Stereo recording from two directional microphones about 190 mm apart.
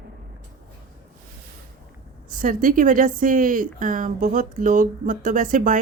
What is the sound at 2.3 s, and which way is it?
Speech, 45° right (ahead or behind).